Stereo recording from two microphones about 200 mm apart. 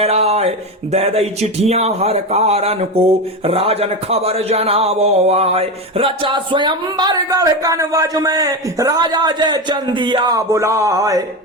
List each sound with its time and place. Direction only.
0.0 s speech: 30° right (ahead or behind)